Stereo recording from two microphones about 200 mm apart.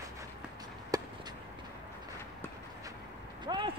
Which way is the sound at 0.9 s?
20° right (ahead or behind).